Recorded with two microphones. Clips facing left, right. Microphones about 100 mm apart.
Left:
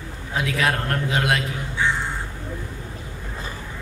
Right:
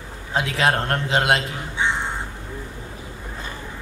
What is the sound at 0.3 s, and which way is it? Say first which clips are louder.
Speech: right 2 dB; 30° right (ahead or behind).